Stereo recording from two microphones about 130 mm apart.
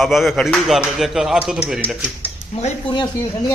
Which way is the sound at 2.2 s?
55° left (ahead or behind).